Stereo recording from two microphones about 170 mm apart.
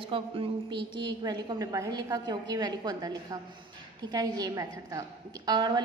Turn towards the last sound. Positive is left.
turn(degrees=-25)  # may be behind; listen again after turning